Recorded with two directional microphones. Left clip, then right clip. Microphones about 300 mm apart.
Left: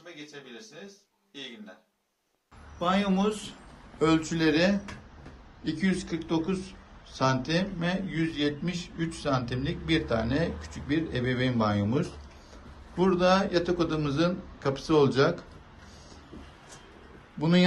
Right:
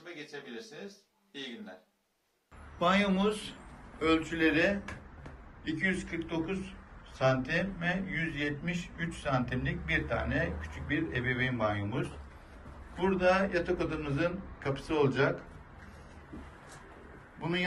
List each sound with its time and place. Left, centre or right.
2.7 s speech: centre
13.0 s speech: centre